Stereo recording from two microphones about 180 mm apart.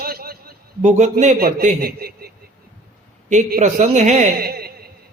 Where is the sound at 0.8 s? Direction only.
40° right (ahead or behind); by 2.3 s 55° right (ahead or behind).